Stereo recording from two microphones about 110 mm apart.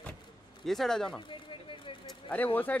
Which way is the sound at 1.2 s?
50° left (ahead or behind).